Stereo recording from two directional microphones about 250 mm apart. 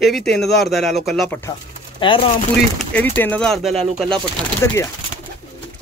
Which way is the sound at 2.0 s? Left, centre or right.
Centre.